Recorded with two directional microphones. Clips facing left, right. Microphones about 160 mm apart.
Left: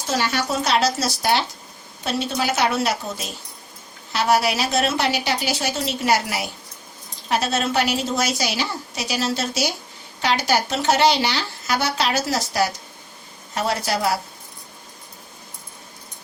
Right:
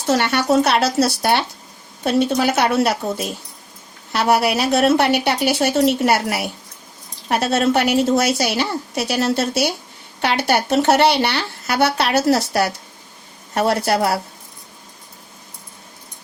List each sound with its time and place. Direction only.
0.1 s speech: 65° right (ahead or behind)